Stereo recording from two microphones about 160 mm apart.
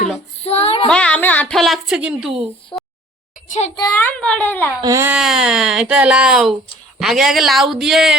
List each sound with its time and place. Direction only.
0.4 s child singing: 40° left (ahead or behind)
0.9 s a sound: 5° left (ahead or behind)
2.7 s a sound: 25° left (ahead or behind)
3.8 s a woman's voice: 20° left (ahead or behind)
4.0 s a child's voice: 5° left (ahead or behind)
4.8 s speech: 20° right (ahead or behind)
5.1 s speech: 5° right (ahead or behind)